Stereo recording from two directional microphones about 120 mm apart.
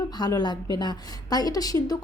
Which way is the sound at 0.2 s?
35° left (ahead or behind).